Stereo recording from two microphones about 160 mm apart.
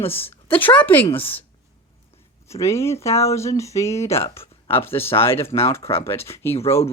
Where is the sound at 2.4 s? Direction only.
20° left (ahead or behind).